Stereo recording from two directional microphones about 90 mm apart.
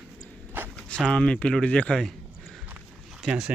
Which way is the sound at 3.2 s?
10° right (ahead or behind).